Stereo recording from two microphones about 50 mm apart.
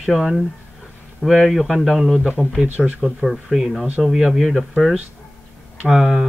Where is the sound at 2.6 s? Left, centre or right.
Right.